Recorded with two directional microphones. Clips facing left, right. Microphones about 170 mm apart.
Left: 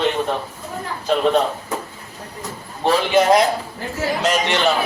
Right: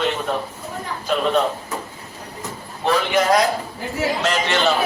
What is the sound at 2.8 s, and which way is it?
A man's voice, 25° left (ahead or behind).